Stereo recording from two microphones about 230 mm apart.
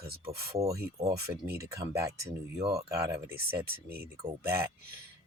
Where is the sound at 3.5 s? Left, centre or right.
Right.